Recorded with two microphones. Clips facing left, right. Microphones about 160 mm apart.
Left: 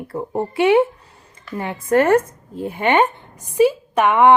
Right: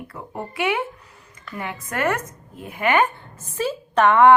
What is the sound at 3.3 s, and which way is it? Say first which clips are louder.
A woman's voice: left 14 dB; 15° left (ahead or behind).